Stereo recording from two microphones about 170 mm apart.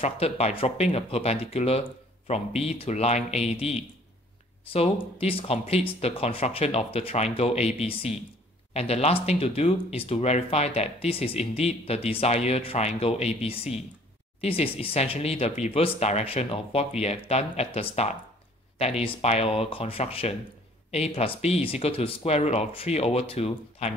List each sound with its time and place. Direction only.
0.0 s speech: 35° left (ahead or behind)